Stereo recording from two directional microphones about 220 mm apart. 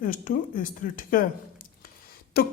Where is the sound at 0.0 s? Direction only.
40° left (ahead or behind).